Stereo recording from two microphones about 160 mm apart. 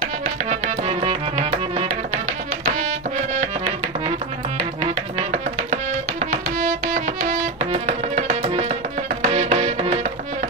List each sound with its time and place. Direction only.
0.5 s music: 40° right (ahead or behind)
6.3 s music: 55° right (ahead or behind)